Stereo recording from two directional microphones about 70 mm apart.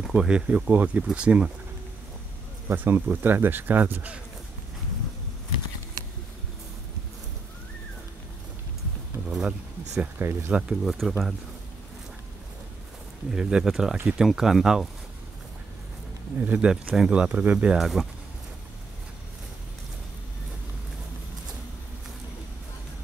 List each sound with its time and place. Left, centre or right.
0.0 s speech: centre
2.7 s speech: right
9.3 s a sound: centre
10.1 s speech: right
10.8 s speech: centre
13.3 s speech: centre
16.3 s speech: right
17.7 s speech: centre